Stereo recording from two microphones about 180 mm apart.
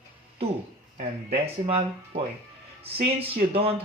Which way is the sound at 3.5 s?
35° right (ahead or behind).